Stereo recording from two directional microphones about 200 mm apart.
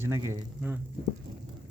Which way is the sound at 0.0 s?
15° right (ahead or behind).